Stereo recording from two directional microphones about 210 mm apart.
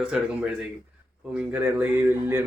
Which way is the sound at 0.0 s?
Centre (ahead or behind).